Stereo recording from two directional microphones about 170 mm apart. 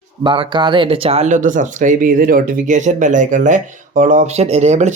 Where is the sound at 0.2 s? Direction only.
30° right (ahead or behind).